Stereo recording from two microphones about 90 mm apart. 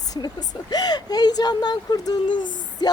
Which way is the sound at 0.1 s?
50° left (ahead or behind).